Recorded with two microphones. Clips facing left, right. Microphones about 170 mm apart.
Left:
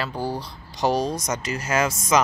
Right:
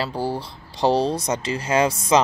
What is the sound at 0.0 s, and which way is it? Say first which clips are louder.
Speech: right 2 dB; 30° right (ahead or behind).